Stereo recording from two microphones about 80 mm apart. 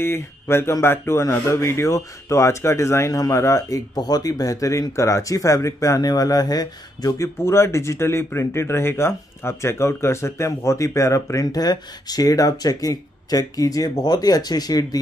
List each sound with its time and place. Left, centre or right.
0.0 s speech: left
7.4 s speech: left